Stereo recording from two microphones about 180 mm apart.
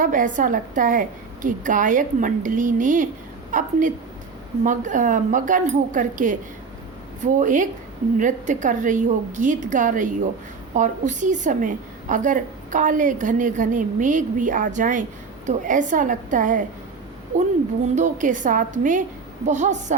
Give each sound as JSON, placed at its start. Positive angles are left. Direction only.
{"t": 0.0, "sound": "a woman's voice", "side_deg": -45}
{"t": 7.3, "sound": "a woman's voice", "side_deg": -45}
{"t": 17.9, "sound": "a woman's voice", "side_deg": -45}